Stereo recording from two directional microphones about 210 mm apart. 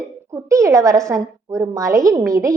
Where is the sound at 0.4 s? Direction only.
15° right (ahead or behind).